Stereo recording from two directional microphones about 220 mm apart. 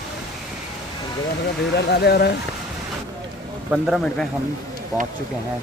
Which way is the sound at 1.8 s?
50° left (ahead or behind).